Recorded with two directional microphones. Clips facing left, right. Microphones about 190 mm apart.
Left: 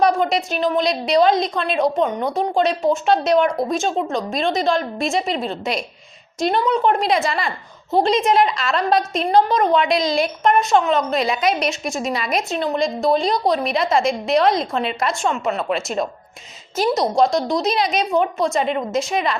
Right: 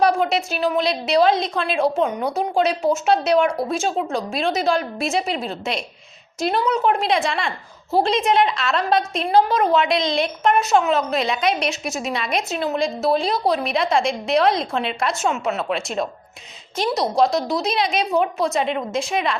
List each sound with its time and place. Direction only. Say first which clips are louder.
0.0 s a woman's voice: left 1 dB; 5° right (ahead or behind)